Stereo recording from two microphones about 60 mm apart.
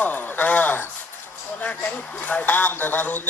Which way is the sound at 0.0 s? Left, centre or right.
Left.